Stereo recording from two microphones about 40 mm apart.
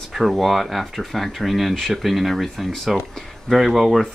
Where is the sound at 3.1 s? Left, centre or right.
Centre.